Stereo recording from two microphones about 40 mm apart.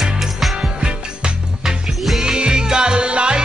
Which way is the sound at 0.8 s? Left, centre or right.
Right.